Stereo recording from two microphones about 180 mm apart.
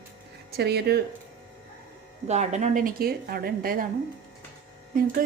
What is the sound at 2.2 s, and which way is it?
Speech, 40° right (ahead or behind).